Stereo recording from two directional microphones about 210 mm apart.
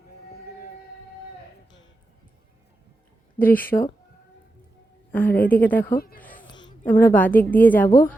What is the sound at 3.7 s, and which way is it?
Speech, 20° left (ahead or behind).